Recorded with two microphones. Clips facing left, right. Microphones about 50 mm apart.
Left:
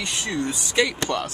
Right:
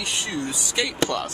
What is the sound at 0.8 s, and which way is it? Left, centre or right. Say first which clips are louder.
Speech: right 1 dB; centre.